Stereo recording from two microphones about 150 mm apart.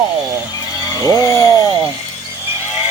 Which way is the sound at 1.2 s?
20° left (ahead or behind).